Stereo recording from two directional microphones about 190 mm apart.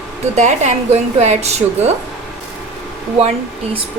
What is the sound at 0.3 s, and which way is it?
A woman's voice, 40° right (ahead or behind).